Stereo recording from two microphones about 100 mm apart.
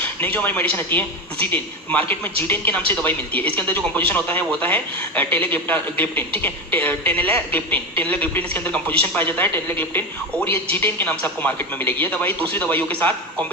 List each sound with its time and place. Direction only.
0.3 s speech: 15° left (ahead or behind)